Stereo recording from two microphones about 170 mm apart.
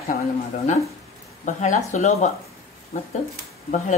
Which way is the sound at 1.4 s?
45° left (ahead or behind).